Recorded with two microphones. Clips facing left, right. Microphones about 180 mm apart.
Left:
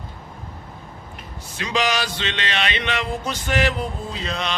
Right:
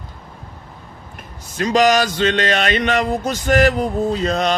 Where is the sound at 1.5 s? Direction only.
45° right (ahead or behind).